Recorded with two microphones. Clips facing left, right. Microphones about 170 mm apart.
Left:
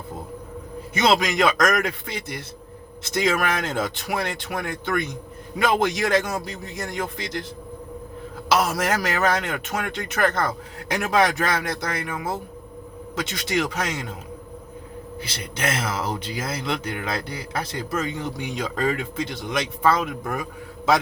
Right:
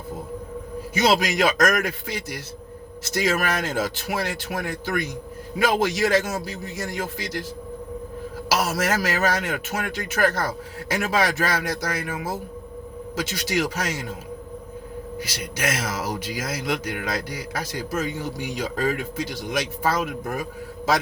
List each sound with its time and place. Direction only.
0.9 s a man's voice: 55° left (ahead or behind)
8.4 s a man's voice: 55° left (ahead or behind)
15.6 s a man's voice: 55° left (ahead or behind)